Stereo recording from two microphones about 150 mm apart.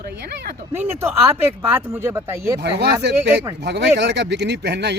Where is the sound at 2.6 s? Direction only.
90° right.